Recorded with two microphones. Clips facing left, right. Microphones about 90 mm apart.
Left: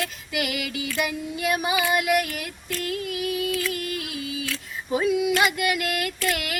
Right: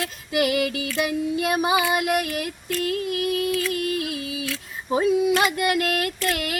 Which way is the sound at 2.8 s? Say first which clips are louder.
Right 4 dB; 30° right (ahead or behind).